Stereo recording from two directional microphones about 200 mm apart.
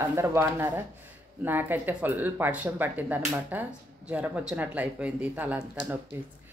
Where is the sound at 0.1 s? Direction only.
10° right (ahead or behind).